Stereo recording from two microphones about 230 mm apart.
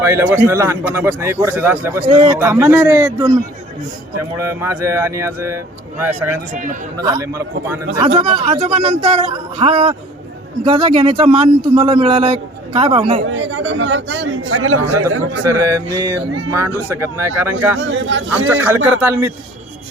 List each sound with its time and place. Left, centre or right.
0.0 s a man's voice: centre
2.0 s a man's voice: right
2.4 s a man's voice: centre
4.4 s a man's voice: centre
7.9 s a man's voice: right
13.2 s a man's voice: right
16.0 s a man's voice: centre
17.7 s speech: right
18.4 s a man's voice: centre